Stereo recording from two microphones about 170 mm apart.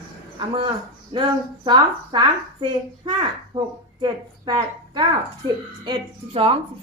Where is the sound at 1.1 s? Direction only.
30° right (ahead or behind).